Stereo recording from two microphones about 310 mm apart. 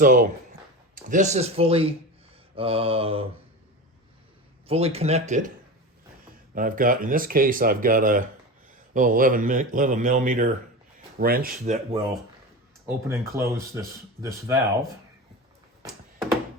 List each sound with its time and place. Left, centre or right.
0.0 s speech: right
2.6 s mantra: centre
4.7 s speech: centre
6.5 s speech: right
13.1 s mantra: centre
15.8 s a sound: centre